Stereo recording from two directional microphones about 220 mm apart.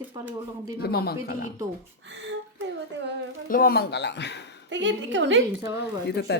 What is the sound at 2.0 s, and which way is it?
Speech, 55° right (ahead or behind).